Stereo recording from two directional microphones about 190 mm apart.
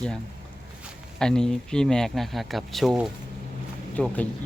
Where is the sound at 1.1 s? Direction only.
5° left (ahead or behind).